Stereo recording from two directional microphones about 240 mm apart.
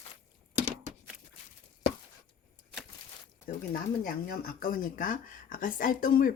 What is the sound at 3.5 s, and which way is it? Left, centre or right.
Speech, left.